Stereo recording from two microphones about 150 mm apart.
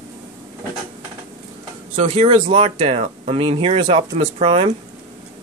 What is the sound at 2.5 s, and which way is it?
Speech, 40° right (ahead or behind).